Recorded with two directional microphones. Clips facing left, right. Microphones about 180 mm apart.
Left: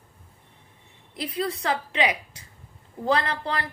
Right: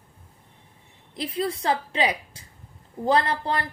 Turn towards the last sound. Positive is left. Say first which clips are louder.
# right 2 dB
turn(degrees=-30)  # may be behind; listen again after turning